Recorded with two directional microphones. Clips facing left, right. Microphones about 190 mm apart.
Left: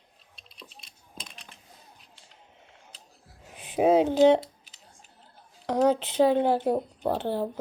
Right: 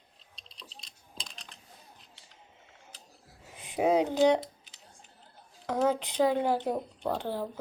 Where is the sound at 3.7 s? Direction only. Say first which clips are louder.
Left 5 dB; 20° left (ahead or behind).